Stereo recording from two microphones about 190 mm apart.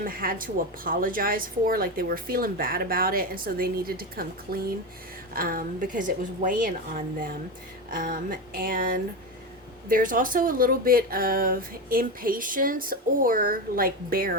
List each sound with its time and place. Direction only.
0.0 s a woman's voice: 50° right (ahead or behind)
7.9 s a woman's voice: 45° right (ahead or behind)